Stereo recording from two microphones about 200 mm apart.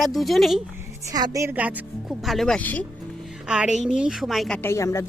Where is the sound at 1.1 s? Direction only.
20° right (ahead or behind); by 2.8 s 5° left (ahead or behind).